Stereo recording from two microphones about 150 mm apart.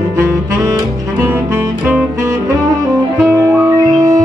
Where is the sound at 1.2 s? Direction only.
15° right (ahead or behind).